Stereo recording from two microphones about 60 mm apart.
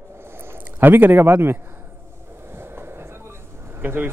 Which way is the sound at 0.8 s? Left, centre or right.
Right.